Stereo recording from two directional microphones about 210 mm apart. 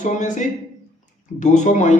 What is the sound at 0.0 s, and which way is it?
Speech, 35° left (ahead or behind).